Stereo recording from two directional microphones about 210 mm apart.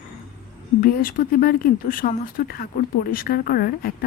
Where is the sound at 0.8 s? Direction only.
45° left (ahead or behind).